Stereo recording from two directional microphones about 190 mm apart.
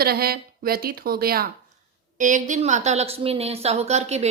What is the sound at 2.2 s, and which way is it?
Speech, 40° right (ahead or behind).